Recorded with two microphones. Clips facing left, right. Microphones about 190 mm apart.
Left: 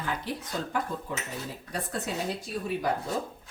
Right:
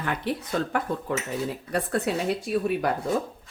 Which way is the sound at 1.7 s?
65° right (ahead or behind).